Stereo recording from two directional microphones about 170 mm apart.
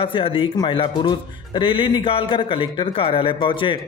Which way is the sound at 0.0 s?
30° left (ahead or behind).